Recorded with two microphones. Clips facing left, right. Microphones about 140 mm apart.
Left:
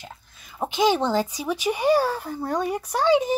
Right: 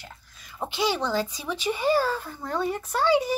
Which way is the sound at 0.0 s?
20° left (ahead or behind).